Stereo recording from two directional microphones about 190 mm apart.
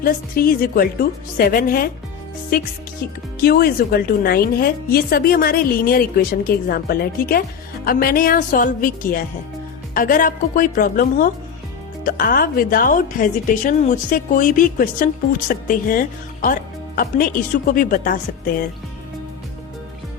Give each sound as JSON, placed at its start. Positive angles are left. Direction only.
{"t": 0.0, "sound": "a woman's voice", "side_deg": 50}
{"t": 3.4, "sound": "a woman's voice", "side_deg": 55}